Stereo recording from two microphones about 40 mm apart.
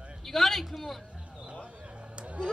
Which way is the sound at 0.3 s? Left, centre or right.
Centre.